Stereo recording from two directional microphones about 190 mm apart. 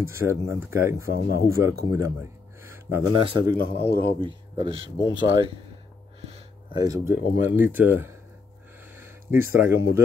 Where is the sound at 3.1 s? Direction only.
20° right (ahead or behind).